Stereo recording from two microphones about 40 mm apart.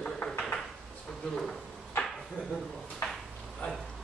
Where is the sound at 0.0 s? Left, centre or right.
Left.